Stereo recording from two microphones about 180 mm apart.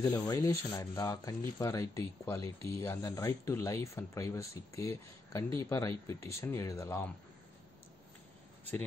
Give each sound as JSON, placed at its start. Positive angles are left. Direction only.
{"t": 0.0, "sound": "speech", "side_deg": 20}